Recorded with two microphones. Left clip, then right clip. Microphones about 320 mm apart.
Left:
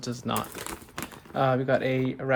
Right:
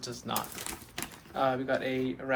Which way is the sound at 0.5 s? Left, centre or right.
Centre.